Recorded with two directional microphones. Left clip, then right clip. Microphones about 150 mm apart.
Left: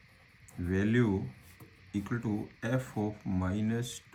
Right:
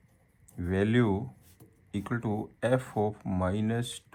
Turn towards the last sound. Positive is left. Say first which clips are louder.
# right 4 dB
turn(degrees=-45)  # may be behind; listen again after turning